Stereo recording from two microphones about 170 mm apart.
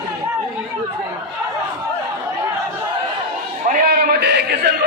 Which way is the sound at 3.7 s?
65° right (ahead or behind).